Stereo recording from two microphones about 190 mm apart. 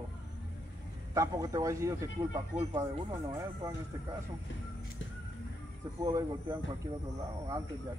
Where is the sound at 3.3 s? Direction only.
20° right (ahead or behind).